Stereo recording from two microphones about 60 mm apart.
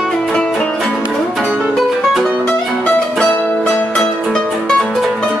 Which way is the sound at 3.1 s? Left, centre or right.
Centre.